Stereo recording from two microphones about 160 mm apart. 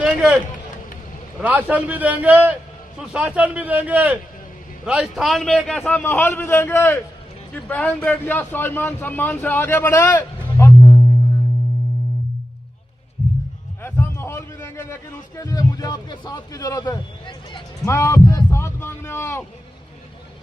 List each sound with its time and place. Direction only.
0.0 s a sound: 5° right (ahead or behind)
1.4 s a man's voice: 10° right (ahead or behind); by 10.2 s 10° left (ahead or behind)
10.6 s music: 20° left (ahead or behind)
13.8 s a sound: 15° left (ahead or behind)
15.4 s a man's voice: 25° left (ahead or behind)
17.8 s heart sounds: 20° left (ahead or behind)